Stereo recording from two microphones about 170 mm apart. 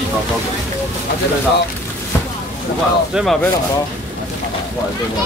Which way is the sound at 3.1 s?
Centre (ahead or behind).